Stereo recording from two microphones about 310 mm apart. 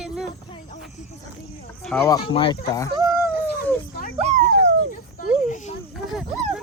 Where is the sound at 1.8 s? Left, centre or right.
Centre.